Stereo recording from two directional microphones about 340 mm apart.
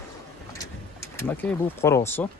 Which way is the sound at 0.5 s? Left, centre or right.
Centre.